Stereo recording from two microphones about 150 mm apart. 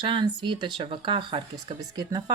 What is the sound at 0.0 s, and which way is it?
Speech, 35° right (ahead or behind).